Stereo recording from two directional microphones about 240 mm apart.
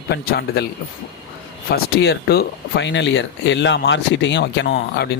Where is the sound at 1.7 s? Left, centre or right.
Left.